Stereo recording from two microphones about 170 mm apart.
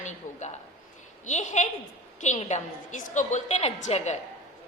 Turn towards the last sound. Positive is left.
turn(degrees=40)  # may be behind; listen again after turning